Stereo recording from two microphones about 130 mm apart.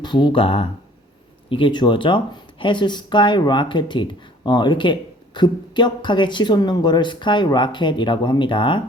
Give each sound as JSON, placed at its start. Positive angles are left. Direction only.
{"t": 0.0, "sound": "speech", "side_deg": 35}